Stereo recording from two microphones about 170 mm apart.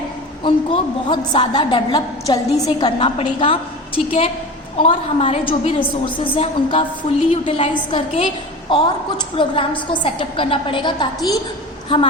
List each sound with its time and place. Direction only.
0.4 s a woman's voice: 30° left (ahead or behind)